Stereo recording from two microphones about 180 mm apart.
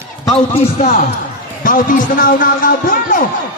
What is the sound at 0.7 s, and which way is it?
Speech, 40° left (ahead or behind).